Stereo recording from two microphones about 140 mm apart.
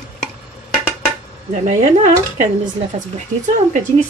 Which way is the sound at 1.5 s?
60° right (ahead or behind).